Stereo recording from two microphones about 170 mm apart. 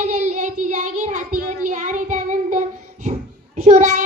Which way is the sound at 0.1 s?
45° right (ahead or behind).